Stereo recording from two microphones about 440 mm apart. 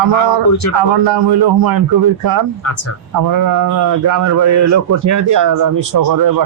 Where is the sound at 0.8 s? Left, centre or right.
Right.